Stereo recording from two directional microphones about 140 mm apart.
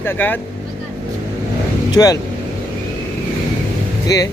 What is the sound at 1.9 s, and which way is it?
Speech, 25° left (ahead or behind).